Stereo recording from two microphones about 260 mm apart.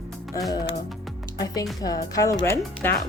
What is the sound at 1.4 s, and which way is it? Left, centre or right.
Speech, centre.